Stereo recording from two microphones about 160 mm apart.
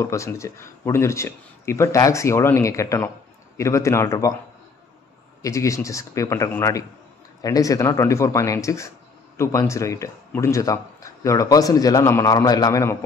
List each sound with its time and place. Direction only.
0.0 s speech: 20° left (ahead or behind)
5.4 s speech: 20° left (ahead or behind)